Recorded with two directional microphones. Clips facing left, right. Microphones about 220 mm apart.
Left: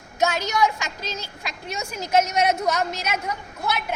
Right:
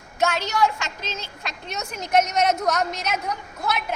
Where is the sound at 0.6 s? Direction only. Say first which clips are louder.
Right 1 dB; 15° left (ahead or behind).